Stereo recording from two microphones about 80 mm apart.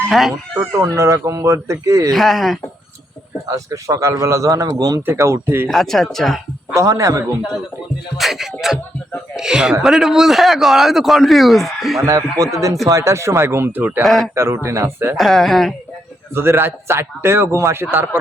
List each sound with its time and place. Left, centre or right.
0.1 s a man's voice: centre
0.6 s a man's voice: right
2.1 s a man's voice: centre
3.5 s a man's voice: right
5.0 s a man's voice: right
5.6 s a man's voice: centre
6.7 s a man's voice: right
8.2 s a man's voice: centre
12.0 s a man's voice: right
14.0 s a man's voice: centre
14.3 s a man's voice: right
15.1 s a man's voice: centre
16.3 s a man's voice: right